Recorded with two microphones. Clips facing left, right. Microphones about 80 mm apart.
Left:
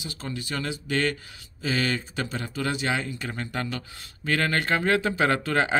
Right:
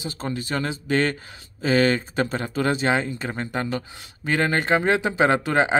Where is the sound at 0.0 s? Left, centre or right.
Right.